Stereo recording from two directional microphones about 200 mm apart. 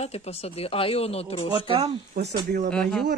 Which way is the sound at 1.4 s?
25° right (ahead or behind).